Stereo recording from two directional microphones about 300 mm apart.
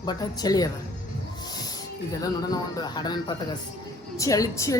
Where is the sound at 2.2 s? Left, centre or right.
Centre.